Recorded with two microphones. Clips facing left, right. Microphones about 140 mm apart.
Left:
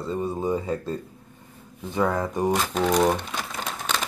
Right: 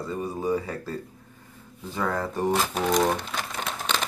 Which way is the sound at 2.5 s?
5° right (ahead or behind).